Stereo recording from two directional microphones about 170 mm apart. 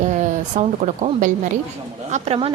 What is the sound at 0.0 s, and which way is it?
Speech, 45° right (ahead or behind).